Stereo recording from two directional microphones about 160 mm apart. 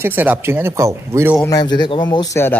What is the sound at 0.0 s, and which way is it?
Speech, 10° right (ahead or behind).